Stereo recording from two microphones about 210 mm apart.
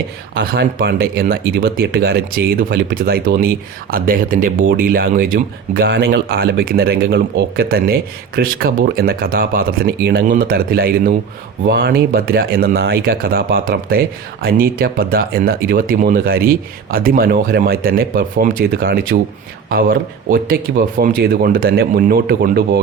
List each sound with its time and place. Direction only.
0.3 s speech: 55° right (ahead or behind)